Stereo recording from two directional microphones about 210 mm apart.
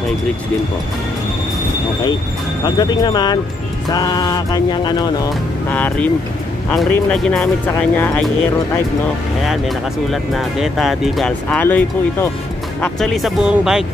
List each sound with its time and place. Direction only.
2.6 s music: 20° left (ahead or behind)
5.7 s speech: 10° left (ahead or behind)
9.5 s speech: centre (ahead or behind)